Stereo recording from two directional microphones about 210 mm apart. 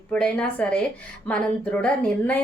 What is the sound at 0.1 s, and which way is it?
Speech, 5° left (ahead or behind).